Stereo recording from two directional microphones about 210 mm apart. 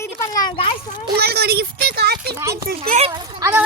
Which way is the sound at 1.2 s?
50° right (ahead or behind).